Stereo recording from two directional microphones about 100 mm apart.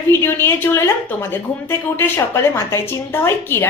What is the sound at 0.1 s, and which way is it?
A woman's voice, 25° left (ahead or behind).